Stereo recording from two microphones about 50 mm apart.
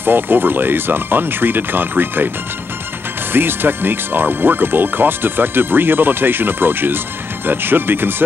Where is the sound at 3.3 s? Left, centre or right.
Right.